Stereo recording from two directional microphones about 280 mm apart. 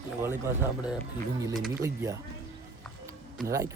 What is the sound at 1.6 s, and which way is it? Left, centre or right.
Speech, centre.